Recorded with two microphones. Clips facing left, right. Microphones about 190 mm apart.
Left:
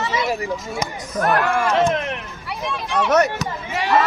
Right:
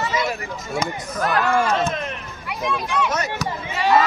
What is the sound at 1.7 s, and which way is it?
Speech, 75° left (ahead or behind).